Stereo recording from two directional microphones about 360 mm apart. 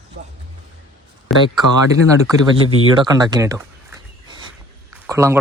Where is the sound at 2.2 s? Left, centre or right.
Centre.